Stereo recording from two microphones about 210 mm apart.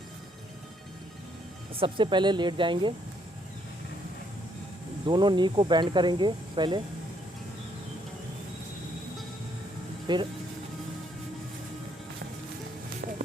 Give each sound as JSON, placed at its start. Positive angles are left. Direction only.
{"t": 1.7, "sound": "speech", "side_deg": -25}
{"t": 5.0, "sound": "speech", "side_deg": -20}
{"t": 10.1, "sound": "speech", "side_deg": -20}